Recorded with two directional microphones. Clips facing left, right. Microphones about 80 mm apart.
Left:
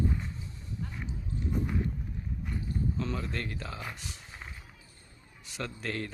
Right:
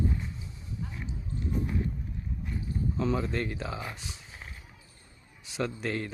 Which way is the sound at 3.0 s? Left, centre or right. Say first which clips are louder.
Right 5 dB; centre.